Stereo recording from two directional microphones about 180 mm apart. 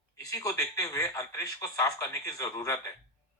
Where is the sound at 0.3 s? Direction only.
20° left (ahead or behind).